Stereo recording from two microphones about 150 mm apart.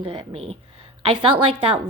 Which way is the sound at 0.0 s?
35° right (ahead or behind).